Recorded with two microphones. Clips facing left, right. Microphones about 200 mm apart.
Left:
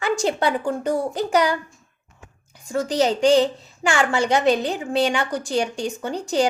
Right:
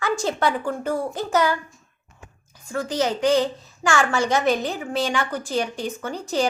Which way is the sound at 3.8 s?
20° left (ahead or behind).